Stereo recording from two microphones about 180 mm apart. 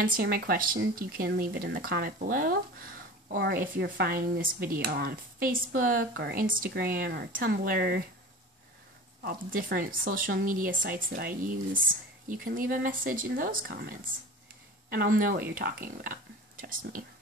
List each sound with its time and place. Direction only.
0.0 s speech: 55° right (ahead or behind)
9.2 s speech: 50° right (ahead or behind)